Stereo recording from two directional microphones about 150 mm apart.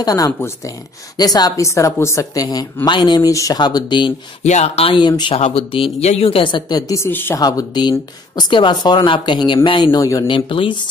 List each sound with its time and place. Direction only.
0.0 s speech: 25° left (ahead or behind)
4.4 s speech: 50° left (ahead or behind); by 5.3 s 30° left (ahead or behind)
5.3 s speech: 40° left (ahead or behind); by 7.3 s 15° left (ahead or behind)
7.3 s speech: 25° left (ahead or behind)
9.8 s speech: 20° left (ahead or behind)
10.3 s speech: 35° left (ahead or behind)